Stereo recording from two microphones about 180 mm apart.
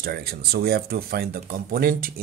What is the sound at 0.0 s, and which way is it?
Speech, 60° right (ahead or behind).